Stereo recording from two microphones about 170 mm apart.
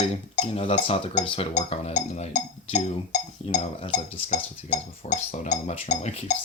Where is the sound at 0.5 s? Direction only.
35° left (ahead or behind).